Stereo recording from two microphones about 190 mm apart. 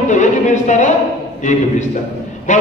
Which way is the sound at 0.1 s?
40° left (ahead or behind).